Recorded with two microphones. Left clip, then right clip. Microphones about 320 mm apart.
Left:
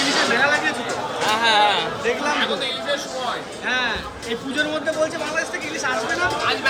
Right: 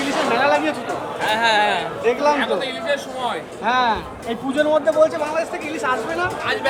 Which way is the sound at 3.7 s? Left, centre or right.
Centre.